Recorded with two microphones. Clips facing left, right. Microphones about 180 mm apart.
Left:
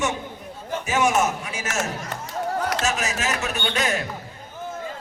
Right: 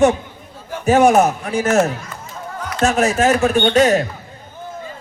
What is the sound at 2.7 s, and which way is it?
Speech, 55° right (ahead or behind).